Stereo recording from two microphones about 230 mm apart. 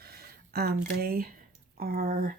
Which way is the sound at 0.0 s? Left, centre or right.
Right.